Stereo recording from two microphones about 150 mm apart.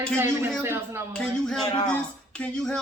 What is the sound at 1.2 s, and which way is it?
Speech, 5° left (ahead or behind).